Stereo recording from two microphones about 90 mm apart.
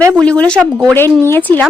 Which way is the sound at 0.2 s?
10° left (ahead or behind).